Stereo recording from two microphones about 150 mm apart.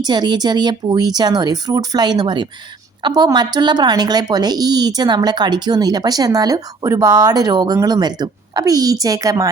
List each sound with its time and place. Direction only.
0.0 s speech: 30° right (ahead or behind)